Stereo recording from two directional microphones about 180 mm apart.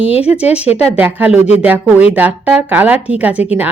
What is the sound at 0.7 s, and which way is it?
Speech, 35° left (ahead or behind).